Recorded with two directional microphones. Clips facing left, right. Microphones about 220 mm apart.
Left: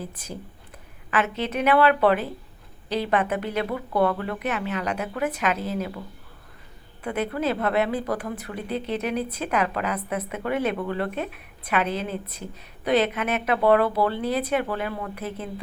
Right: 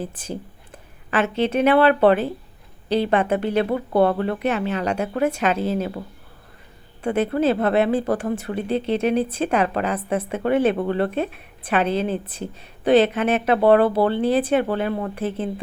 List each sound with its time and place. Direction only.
0.0 s speech: 30° right (ahead or behind)
7.0 s speech: 30° right (ahead or behind)